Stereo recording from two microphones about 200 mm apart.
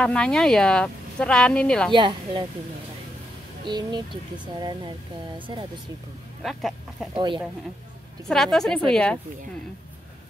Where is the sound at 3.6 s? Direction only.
20° right (ahead or behind).